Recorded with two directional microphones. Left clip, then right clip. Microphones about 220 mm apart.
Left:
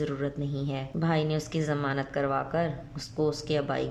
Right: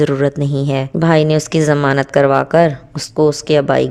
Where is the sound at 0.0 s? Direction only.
50° right (ahead or behind).